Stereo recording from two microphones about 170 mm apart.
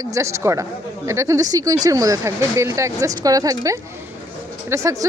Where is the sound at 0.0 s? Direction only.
20° right (ahead or behind).